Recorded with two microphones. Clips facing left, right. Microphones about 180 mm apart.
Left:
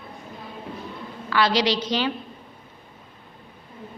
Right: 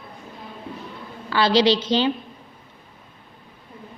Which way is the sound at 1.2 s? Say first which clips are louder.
Right 4 dB; 30° right (ahead or behind).